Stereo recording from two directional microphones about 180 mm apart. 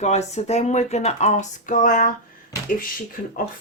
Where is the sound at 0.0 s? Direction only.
40° left (ahead or behind).